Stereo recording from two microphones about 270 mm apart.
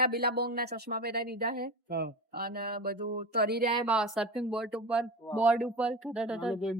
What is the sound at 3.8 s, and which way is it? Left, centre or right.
Speech, centre.